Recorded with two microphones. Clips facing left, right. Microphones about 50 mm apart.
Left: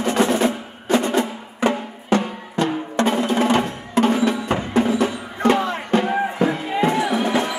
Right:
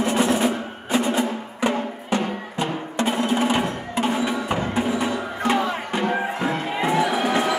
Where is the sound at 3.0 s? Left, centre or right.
Left.